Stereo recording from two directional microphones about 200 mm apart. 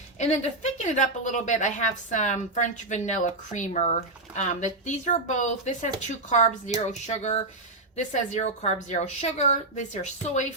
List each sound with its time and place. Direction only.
0.2 s a woman's voice: 35° left (ahead or behind)